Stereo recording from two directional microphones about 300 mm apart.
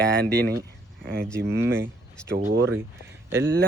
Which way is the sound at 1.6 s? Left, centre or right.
Centre.